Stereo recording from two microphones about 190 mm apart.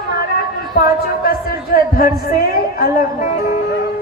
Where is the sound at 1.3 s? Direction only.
50° left (ahead or behind).